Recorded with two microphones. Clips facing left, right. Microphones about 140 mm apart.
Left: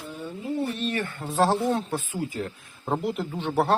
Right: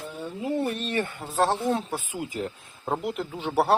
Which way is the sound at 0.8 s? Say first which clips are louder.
Even; 30° right (ahead or behind).